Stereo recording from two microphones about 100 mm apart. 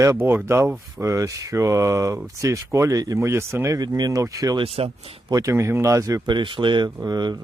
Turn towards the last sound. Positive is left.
turn(degrees=-45)  # may be behind; listen again after turning